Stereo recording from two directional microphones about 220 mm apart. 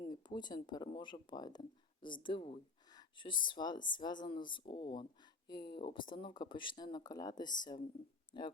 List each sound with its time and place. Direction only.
0.1 s speech: 20° left (ahead or behind)